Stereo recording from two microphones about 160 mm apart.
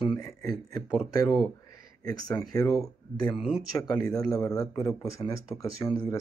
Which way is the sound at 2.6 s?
20° left (ahead or behind).